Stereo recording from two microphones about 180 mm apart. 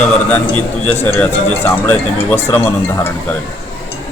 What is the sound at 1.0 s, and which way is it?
Speech, 10° left (ahead or behind).